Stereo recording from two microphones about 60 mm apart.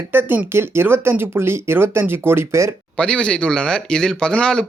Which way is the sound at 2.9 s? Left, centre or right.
Centre.